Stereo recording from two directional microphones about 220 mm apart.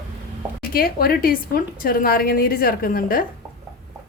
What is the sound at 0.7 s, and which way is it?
A woman's voice, 40° left (ahead or behind).